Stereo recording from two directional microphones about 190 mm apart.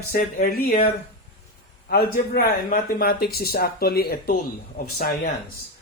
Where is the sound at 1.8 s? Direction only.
55° left (ahead or behind).